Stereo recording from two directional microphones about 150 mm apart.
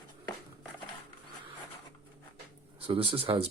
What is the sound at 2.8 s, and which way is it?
Speech, 35° right (ahead or behind).